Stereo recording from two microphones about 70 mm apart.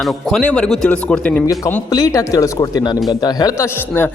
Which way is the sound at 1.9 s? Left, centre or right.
Left.